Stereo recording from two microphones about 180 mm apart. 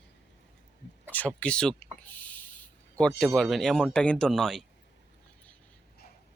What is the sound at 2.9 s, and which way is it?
Speech, 5° left (ahead or behind).